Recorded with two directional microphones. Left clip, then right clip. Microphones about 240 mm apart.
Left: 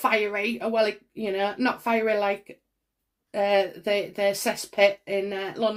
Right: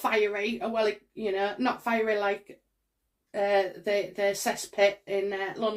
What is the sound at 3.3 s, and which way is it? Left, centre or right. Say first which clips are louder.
Speech: left 3 dB; left.